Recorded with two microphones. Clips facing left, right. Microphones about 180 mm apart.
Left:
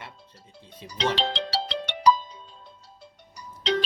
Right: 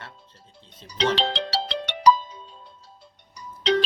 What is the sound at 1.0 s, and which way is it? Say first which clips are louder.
Music: right 3 dB; 75° right (ahead or behind).